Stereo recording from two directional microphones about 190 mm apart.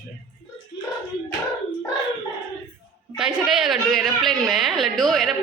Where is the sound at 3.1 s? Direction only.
Centre (ahead or behind).